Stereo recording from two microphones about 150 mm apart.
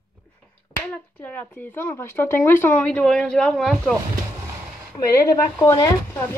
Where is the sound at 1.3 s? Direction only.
15° left (ahead or behind).